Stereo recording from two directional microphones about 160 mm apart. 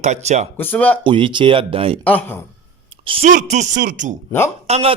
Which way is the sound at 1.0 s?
30° right (ahead or behind).